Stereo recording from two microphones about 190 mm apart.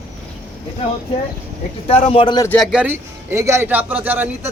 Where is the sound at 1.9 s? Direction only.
30° left (ahead or behind).